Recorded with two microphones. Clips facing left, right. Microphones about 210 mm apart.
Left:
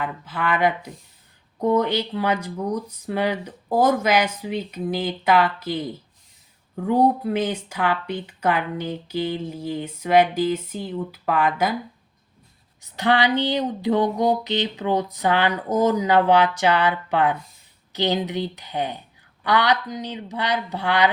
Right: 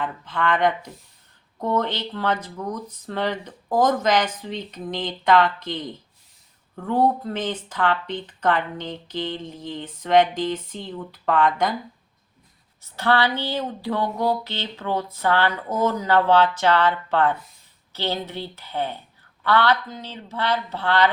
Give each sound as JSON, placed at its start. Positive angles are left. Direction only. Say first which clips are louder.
{"t": 0.0, "sound": "speech", "louder": "right 1 dB", "side_deg": 5}
{"t": 12.8, "sound": "speech", "louder": "left 1 dB", "side_deg": 15}